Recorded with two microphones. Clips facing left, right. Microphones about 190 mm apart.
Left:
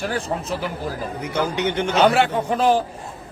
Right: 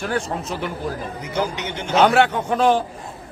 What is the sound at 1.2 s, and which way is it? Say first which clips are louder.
Speech: left 3 dB; 60° left (ahead or behind).